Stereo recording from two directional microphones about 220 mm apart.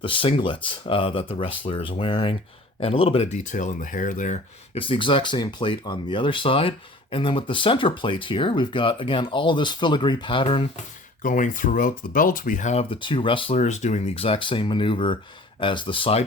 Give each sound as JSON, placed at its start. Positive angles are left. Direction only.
{"t": 0.0, "sound": "speech", "side_deg": 25}
{"t": 11.2, "sound": "speech", "side_deg": 35}